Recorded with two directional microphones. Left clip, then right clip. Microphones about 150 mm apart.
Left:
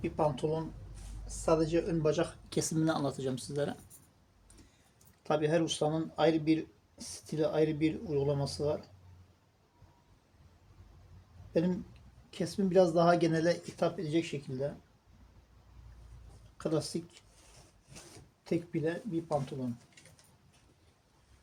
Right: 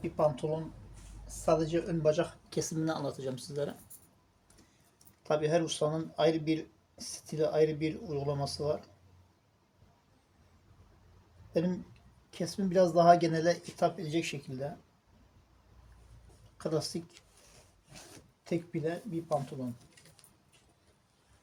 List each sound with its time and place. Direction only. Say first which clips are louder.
1.5 s speech: even; 40° left (ahead or behind)
5.2 s speech: right 1 dB; 35° left (ahead or behind)
11.5 s speech: left 1 dB; 35° left (ahead or behind)
16.6 s speech: even; 30° left (ahead or behind)
18.4 s speech: left 1 dB; 35° left (ahead or behind)